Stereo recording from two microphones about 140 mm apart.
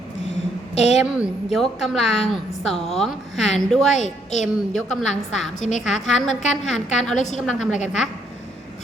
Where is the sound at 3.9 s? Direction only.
55° left (ahead or behind).